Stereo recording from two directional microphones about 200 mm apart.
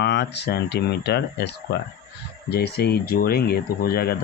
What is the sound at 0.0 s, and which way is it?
Speech, 60° left (ahead or behind).